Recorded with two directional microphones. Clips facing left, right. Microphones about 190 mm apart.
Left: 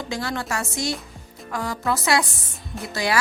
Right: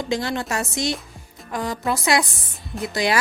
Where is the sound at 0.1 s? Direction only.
20° right (ahead or behind).